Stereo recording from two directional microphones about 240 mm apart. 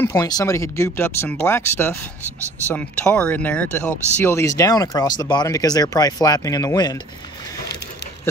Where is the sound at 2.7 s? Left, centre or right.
Centre.